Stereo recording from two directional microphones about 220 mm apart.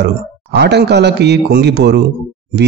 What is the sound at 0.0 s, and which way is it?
Speech, 50° right (ahead or behind).